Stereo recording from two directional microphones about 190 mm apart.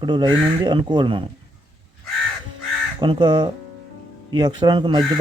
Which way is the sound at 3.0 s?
25° right (ahead or behind).